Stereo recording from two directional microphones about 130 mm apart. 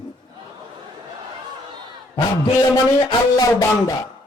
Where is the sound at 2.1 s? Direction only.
35° left (ahead or behind).